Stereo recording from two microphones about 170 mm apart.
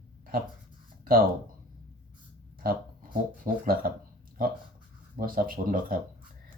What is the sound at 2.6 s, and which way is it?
Speech, 55° right (ahead or behind).